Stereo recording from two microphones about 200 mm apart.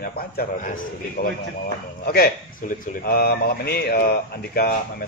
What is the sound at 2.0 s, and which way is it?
A man's voice, 50° left (ahead or behind).